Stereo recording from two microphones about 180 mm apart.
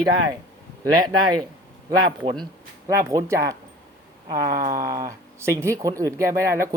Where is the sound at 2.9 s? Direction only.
15° right (ahead or behind).